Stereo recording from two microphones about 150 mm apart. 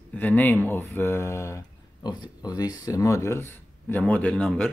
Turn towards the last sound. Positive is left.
turn(degrees=5)  # may be behind; listen again after turning